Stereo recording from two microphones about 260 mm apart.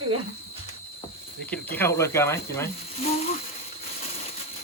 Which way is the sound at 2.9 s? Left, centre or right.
Left.